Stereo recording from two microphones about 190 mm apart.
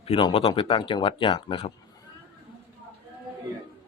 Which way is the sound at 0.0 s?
30° left (ahead or behind).